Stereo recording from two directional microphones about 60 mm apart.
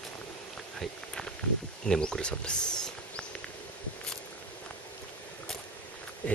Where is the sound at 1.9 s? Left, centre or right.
Centre.